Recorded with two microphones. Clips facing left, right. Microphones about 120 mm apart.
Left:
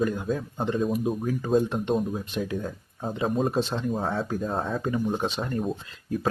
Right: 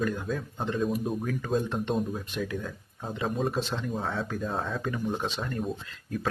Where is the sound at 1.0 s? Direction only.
5° left (ahead or behind).